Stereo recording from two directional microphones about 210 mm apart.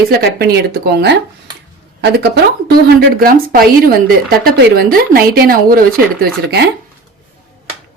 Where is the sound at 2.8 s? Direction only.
45° right (ahead or behind).